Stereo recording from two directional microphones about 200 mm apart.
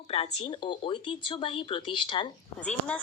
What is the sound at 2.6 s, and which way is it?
Speech, 5° left (ahead or behind).